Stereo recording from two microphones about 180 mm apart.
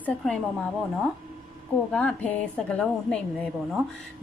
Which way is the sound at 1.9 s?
5° left (ahead or behind).